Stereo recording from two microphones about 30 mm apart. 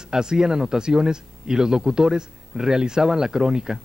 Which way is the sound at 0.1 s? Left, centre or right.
Right.